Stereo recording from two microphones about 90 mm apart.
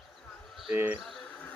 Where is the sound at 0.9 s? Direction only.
10° left (ahead or behind).